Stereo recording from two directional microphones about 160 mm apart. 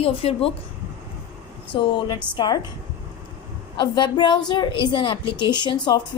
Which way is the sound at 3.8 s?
30° left (ahead or behind).